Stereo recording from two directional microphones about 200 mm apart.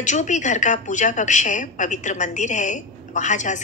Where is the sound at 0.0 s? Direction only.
35° left (ahead or behind).